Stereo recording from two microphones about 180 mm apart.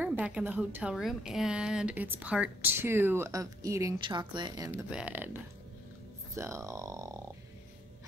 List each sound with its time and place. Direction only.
0.0 s speech: 10° right (ahead or behind); by 4.6 s 25° right (ahead or behind)
4.6 s speech: 10° right (ahead or behind)